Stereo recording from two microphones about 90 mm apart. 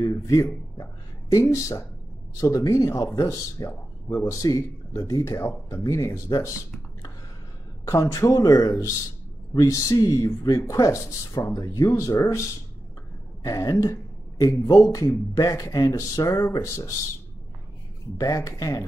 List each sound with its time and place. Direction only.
0.1 s speech: 35° left (ahead or behind)
7.8 s speech: 35° left (ahead or behind)
18.1 s speech: 40° left (ahead or behind)